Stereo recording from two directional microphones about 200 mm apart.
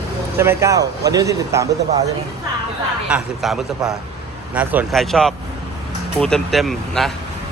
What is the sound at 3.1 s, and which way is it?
Speech, centre (ahead or behind).